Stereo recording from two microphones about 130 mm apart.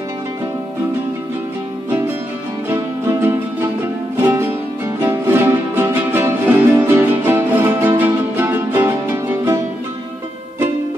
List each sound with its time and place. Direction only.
1.9 s music: 15° right (ahead or behind)